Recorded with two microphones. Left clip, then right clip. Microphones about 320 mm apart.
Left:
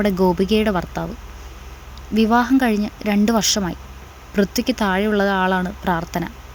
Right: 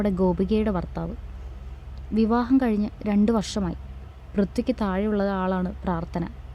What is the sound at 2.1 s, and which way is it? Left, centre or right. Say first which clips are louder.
Speech: left 6 dB; centre.